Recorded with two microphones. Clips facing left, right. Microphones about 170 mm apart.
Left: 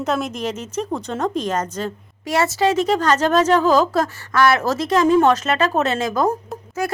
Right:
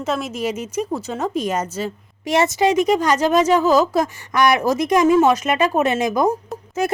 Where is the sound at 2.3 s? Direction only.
20° right (ahead or behind).